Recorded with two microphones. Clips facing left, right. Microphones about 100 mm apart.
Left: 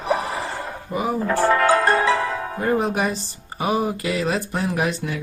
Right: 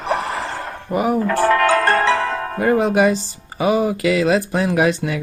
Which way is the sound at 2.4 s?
75° right (ahead or behind).